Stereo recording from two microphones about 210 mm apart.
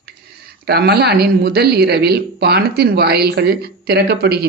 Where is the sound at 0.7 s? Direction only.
50° right (ahead or behind).